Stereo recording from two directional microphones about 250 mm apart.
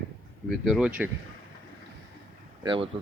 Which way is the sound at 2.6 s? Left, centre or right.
Centre.